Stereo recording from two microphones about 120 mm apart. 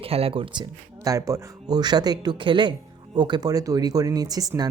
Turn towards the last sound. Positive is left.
turn(degrees=-30)  # may be behind; listen again after turning